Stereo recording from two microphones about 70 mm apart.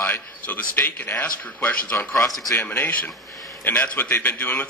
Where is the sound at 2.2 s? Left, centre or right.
Left.